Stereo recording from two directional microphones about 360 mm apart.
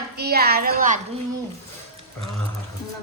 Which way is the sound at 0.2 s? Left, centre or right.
Right.